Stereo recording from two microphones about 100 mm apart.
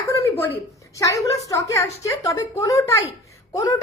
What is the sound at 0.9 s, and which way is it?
A woman's voice, 30° left (ahead or behind).